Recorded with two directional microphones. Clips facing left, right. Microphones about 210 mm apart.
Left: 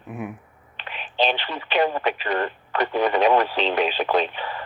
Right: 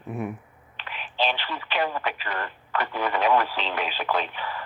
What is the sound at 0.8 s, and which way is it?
Speech, 20° left (ahead or behind).